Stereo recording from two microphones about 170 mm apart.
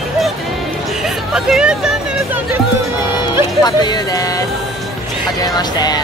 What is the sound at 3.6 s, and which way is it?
Speech, 25° left (ahead or behind).